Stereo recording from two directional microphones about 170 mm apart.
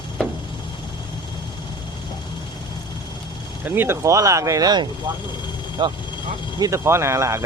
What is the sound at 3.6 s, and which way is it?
Speech, 10° right (ahead or behind).